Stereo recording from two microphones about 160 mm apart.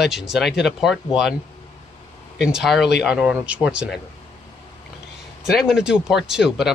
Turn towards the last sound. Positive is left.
turn(degrees=-5)  # may be behind; listen again after turning